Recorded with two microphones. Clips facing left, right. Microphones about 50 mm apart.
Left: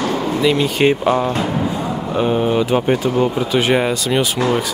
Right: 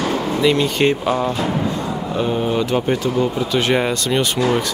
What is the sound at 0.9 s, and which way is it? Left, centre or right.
Speech, centre.